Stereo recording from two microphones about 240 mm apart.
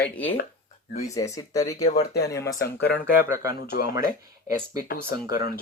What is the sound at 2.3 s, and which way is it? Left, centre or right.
Speech, centre.